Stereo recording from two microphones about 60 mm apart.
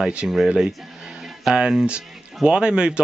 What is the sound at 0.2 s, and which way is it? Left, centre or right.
Speech, centre.